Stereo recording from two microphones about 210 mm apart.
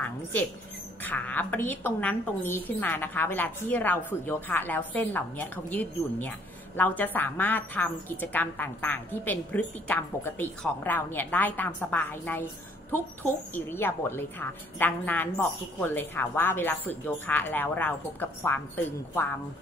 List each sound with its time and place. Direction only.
0.0 s a woman's voice: 5° left (ahead or behind)